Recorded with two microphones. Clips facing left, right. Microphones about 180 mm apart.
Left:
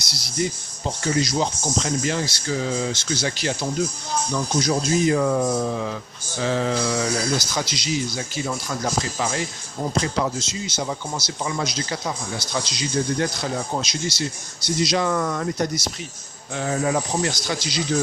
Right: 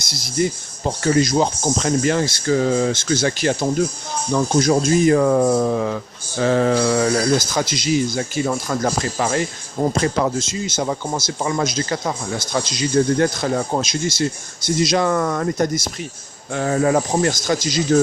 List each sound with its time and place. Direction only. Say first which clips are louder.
0.0 s speech: right 5 dB; 50° right (ahead or behind)